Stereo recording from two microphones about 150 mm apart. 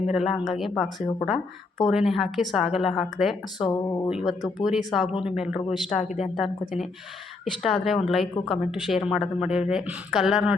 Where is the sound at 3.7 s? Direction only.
20° left (ahead or behind).